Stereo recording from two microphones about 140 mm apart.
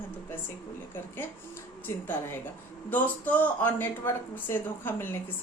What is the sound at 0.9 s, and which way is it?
Speech, 15° left (ahead or behind).